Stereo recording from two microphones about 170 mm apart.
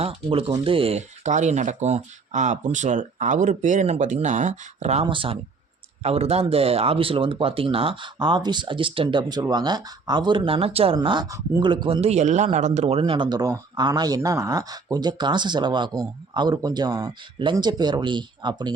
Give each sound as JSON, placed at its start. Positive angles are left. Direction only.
{"t": 0.0, "sound": "speech", "side_deg": -35}
{"t": 5.0, "sound": "a man's voice", "side_deg": -30}